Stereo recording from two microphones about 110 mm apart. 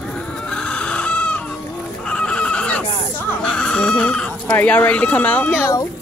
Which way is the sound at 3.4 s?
10° left (ahead or behind).